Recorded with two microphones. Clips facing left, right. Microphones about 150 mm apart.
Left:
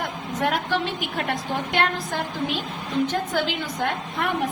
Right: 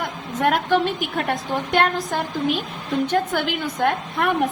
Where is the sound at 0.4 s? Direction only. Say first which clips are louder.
Right 5 dB; 55° right (ahead or behind).